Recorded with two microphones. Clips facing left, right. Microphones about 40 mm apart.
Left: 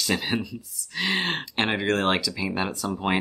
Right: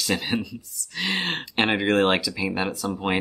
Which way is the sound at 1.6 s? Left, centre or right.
Centre.